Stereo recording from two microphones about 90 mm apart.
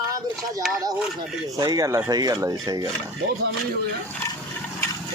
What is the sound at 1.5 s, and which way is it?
Speech, 40° right (ahead or behind).